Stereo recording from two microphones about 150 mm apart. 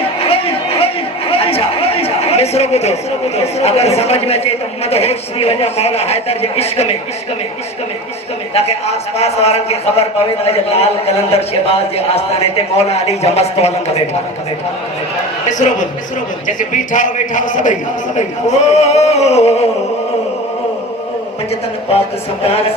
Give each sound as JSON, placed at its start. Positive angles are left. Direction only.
{"t": 0.2, "sound": "chatter", "side_deg": 40}
{"t": 1.3, "sound": "a man's voice", "side_deg": 40}
{"t": 8.5, "sound": "a man's voice", "side_deg": 45}
{"t": 15.4, "sound": "a man's voice", "side_deg": 55}
{"t": 21.9, "sound": "speech", "side_deg": 40}